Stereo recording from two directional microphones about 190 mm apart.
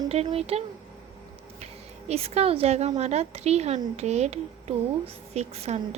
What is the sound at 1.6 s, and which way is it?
Speech, 35° right (ahead or behind).